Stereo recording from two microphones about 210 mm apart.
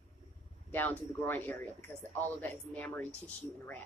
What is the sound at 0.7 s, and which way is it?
Speech, 10° left (ahead or behind).